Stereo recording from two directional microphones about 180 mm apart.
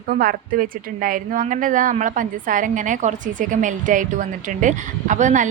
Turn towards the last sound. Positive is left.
turn(degrees=-45)  # may be behind; listen again after turning